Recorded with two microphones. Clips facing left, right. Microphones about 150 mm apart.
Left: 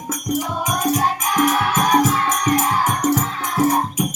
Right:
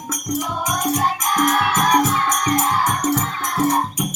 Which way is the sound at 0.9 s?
5° left (ahead or behind).